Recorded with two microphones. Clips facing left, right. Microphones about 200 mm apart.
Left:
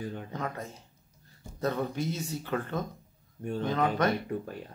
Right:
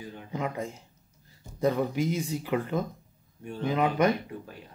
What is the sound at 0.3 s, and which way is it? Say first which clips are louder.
Speech: right 4 dB; 10° right (ahead or behind).